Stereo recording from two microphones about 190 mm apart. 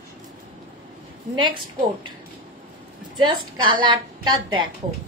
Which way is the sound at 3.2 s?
25° right (ahead or behind).